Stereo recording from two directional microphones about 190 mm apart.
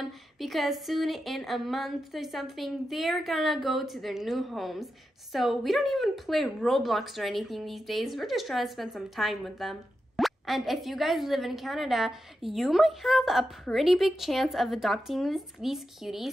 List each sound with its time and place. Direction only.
0.0 s speech: centre (ahead or behind)